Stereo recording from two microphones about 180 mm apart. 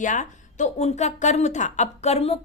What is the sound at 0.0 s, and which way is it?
Speech, 45° left (ahead or behind).